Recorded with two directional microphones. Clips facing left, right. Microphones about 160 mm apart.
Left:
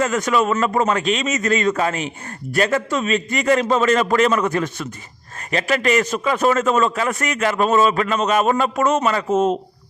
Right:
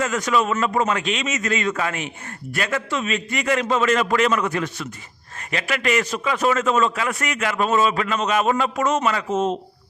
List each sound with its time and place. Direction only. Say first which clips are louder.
0.0 s a man's voice: left 3 dB; 50° left (ahead or behind)